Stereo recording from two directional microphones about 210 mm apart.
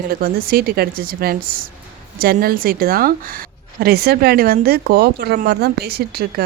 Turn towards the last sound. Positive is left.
turn(degrees=-50)  # may be behind; listen again after turning